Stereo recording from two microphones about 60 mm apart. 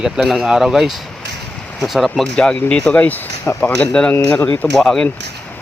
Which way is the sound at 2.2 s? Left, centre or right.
Centre.